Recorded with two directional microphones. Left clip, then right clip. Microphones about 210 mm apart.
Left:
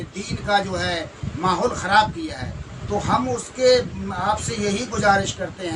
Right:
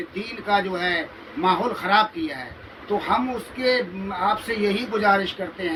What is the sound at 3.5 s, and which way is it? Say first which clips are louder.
Speech: left 6 dB; 20° left (ahead or behind).